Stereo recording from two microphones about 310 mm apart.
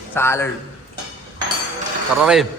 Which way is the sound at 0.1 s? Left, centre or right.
Centre.